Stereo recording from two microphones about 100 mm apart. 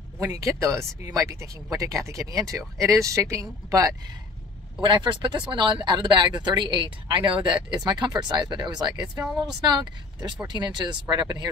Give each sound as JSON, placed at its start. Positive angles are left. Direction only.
{"t": 0.2, "sound": "speech", "side_deg": -35}
{"t": 4.8, "sound": "speech", "side_deg": -55}